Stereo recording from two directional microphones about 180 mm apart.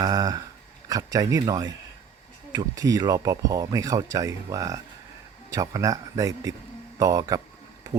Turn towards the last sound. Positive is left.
turn(degrees=-20)  # may be behind; listen again after turning